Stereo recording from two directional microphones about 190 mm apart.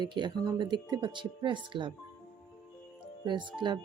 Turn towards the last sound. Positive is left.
turn(degrees=-25)  # may be behind; listen again after turning